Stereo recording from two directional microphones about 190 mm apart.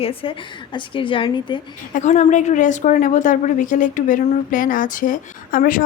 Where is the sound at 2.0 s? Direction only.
40° left (ahead or behind).